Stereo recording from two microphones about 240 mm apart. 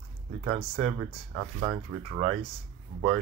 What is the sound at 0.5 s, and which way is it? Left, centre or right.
Speech, right.